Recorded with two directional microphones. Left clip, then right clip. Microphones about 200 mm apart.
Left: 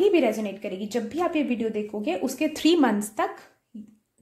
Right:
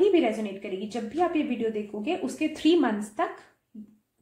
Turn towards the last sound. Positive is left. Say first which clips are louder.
# left 2 dB
turn(degrees=40)  # may be behind; listen again after turning